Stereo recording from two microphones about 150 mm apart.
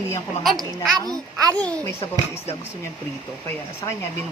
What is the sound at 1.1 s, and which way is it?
Speech, 25° right (ahead or behind).